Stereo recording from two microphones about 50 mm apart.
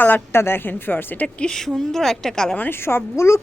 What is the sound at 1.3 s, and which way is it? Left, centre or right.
Speech, centre.